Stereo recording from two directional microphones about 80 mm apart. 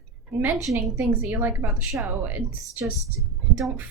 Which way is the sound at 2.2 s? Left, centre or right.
Right.